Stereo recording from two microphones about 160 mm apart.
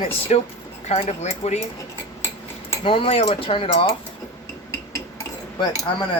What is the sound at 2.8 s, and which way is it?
Speech, 35° left (ahead or behind).